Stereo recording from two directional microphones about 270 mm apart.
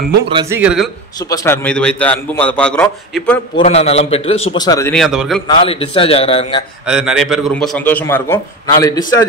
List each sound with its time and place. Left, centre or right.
0.3 s speech: centre
0.6 s a man's voice: centre
1.3 s a man's voice: centre
3.5 s a man's voice: left; by 5.4 s centre
5.6 s a man's voice: centre
6.9 s a man's voice: centre